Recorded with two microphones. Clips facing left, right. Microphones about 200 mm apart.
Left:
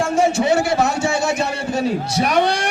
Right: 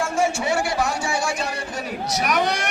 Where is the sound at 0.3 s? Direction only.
20° left (ahead or behind).